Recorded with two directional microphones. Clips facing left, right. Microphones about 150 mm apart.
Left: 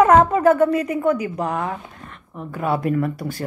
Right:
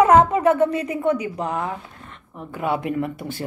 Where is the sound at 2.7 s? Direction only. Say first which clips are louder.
Left 3 dB; 40° left (ahead or behind).